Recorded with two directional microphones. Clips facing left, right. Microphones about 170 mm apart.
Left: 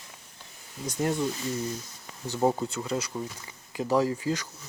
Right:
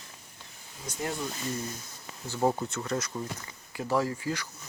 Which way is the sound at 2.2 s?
15° left (ahead or behind).